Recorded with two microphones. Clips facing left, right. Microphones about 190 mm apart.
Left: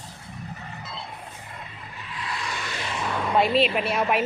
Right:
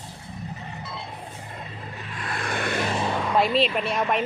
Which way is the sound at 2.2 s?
55° right (ahead or behind).